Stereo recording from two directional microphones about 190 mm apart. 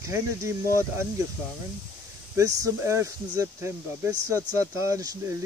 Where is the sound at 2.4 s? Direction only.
15° right (ahead or behind).